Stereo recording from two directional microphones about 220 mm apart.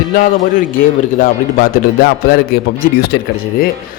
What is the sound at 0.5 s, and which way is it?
A man's voice, 40° left (ahead or behind).